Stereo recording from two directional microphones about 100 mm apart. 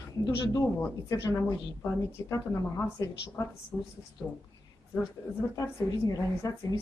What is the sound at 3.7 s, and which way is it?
Speech, 25° right (ahead or behind).